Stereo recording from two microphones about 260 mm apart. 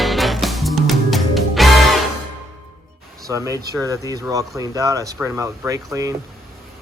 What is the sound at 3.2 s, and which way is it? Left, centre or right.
Speech, centre.